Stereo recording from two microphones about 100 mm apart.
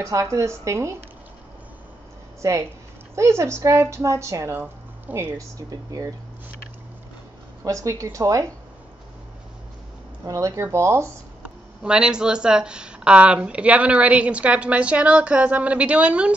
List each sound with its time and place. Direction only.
0.0 s a woman's voice: 30° right (ahead or behind)
2.4 s a woman's voice: 30° right (ahead or behind)
5.7 s a woman's voice: 40° right (ahead or behind)
7.6 s a woman's voice: 35° right (ahead or behind)
10.2 s a woman's voice: 35° right (ahead or behind)
11.4 s speech: 10° right (ahead or behind)